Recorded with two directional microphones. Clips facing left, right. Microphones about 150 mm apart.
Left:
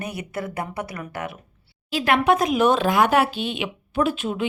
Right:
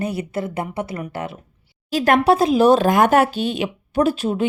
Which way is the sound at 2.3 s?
30° right (ahead or behind).